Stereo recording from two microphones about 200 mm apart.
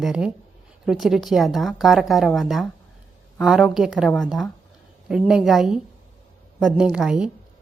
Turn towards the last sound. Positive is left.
turn(degrees=-5)  # may be behind; listen again after turning